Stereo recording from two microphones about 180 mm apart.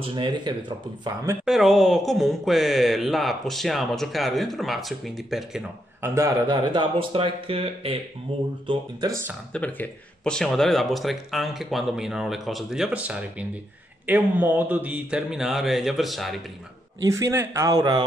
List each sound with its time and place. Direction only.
0.0 s speech: 25° right (ahead or behind)
1.4 s speech: centre (ahead or behind)
6.0 s speech: 15° right (ahead or behind)
9.5 s speech: 10° left (ahead or behind)
17.0 s speech: 15° right (ahead or behind)